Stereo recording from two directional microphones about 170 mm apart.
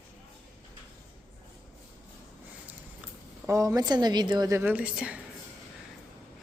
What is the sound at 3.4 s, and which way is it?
A woman's voice, 20° right (ahead or behind).